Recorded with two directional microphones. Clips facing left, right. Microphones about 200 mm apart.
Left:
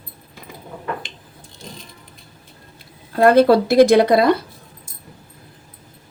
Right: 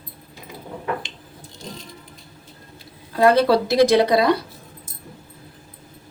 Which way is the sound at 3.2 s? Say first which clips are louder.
Left 4 dB; 55° left (ahead or behind).